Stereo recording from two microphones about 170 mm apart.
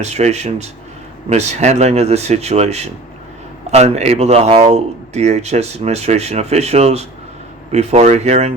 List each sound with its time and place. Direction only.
0.0 s speech: 40° right (ahead or behind)